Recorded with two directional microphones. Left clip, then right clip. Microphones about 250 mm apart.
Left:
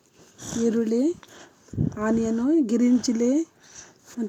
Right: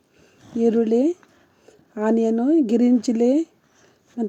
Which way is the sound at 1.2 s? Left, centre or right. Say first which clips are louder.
Left 8 dB; left.